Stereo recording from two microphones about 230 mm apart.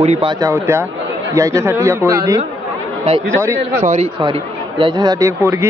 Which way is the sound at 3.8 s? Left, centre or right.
Right.